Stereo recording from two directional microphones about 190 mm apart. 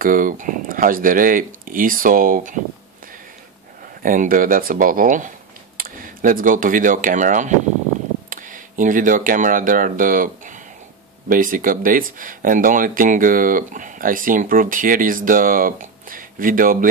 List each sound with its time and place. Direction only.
0.0 s speech: 45° right (ahead or behind)
4.0 s speech: 45° right (ahead or behind)